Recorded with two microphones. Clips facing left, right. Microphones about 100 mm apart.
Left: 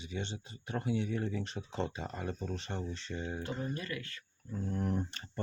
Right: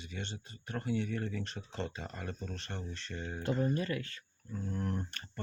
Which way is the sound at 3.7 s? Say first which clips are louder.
Right 5 dB; 30° right (ahead or behind).